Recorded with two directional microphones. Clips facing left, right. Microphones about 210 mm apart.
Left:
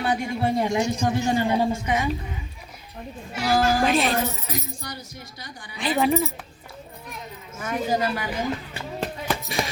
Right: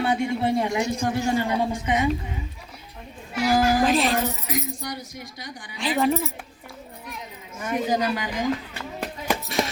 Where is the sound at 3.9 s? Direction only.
Centre (ahead or behind).